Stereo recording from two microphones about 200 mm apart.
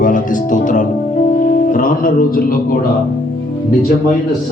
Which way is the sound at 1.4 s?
45° left (ahead or behind).